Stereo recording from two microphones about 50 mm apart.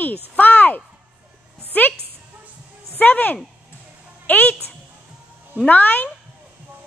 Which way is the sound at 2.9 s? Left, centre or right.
Left.